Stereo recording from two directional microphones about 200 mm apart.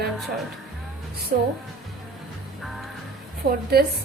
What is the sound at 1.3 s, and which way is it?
Speech, 50° right (ahead or behind).